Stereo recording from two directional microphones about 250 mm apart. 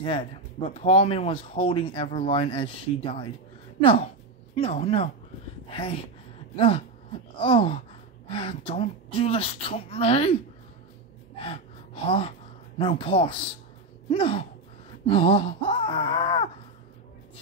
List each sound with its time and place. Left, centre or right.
0.0 s speech: left
11.3 s speech: left